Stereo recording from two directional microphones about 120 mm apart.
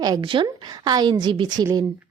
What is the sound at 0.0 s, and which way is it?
A woman's voice, 40° right (ahead or behind).